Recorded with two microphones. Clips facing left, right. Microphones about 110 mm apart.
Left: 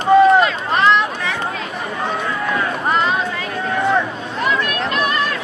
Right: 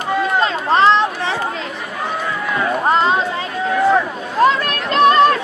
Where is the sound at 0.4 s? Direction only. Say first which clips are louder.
Right 2 dB; 30° right (ahead or behind).